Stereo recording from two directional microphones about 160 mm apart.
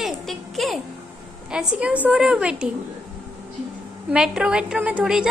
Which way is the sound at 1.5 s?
5° right (ahead or behind).